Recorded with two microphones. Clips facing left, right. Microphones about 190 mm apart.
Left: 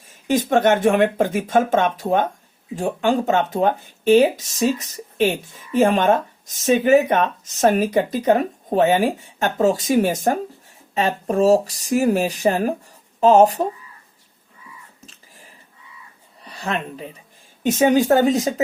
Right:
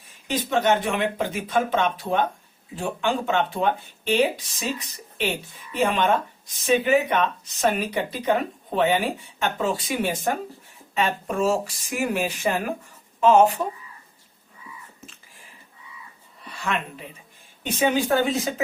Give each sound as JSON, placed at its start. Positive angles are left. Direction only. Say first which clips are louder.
{"t": 0.3, "sound": "speech", "louder": "left 5 dB", "side_deg": 50}
{"t": 16.4, "sound": "speech", "louder": "left 2 dB", "side_deg": 35}